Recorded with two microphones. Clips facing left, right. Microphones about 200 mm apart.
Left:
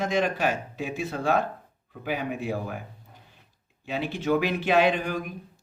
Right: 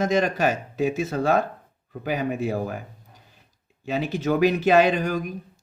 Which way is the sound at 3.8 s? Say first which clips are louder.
Right 4 dB; 40° right (ahead or behind).